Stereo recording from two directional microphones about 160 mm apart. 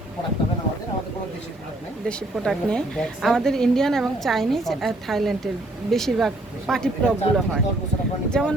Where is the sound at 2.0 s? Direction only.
Centre (ahead or behind).